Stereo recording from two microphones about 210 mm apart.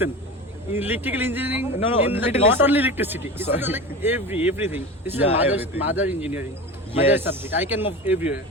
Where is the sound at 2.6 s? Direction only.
10° right (ahead or behind).